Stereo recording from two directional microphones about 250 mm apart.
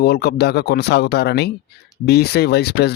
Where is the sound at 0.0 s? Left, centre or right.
Left.